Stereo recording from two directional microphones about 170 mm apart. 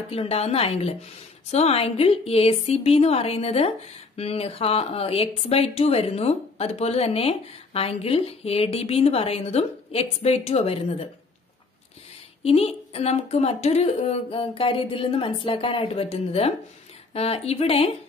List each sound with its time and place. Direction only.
0.1 s speech: 35° left (ahead or behind)
12.4 s speech: 35° left (ahead or behind)